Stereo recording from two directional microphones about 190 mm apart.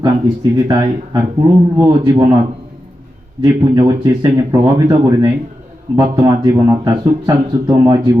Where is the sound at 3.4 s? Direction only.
20° right (ahead or behind).